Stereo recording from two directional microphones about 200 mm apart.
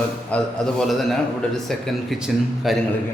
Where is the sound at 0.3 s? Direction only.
5° left (ahead or behind).